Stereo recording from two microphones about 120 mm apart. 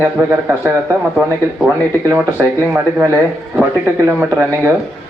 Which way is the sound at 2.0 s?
25° right (ahead or behind).